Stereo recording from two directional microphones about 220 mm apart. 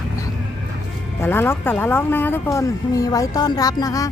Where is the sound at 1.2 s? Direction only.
10° left (ahead or behind).